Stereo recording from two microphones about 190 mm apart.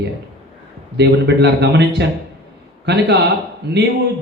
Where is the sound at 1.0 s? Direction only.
60° right (ahead or behind).